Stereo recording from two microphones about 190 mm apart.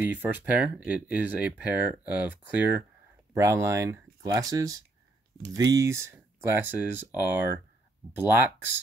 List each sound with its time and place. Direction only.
0.0 s speech: 10° right (ahead or behind)